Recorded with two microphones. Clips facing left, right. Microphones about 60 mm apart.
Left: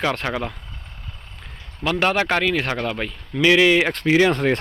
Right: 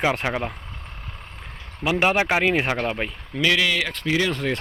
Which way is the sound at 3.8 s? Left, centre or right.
Left.